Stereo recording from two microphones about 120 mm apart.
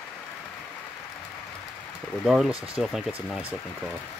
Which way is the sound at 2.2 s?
5° right (ahead or behind).